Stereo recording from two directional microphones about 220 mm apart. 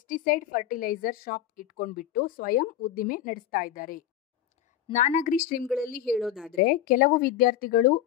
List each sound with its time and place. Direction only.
0.0 s a woman's voice: 40° left (ahead or behind)
6.0 s a woman's voice: centre (ahead or behind)
6.5 s a woman's voice: 40° left (ahead or behind)